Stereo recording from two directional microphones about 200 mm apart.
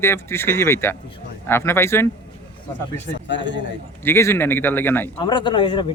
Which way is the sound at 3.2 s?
65° left (ahead or behind).